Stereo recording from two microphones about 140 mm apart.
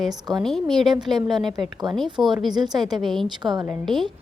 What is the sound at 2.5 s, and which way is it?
Speech, 30° right (ahead or behind).